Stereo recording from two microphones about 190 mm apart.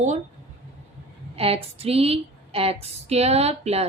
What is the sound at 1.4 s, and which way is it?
A woman's voice, 30° right (ahead or behind).